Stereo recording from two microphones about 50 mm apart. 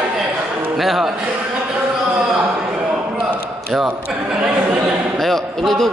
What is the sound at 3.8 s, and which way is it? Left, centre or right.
Speech, centre.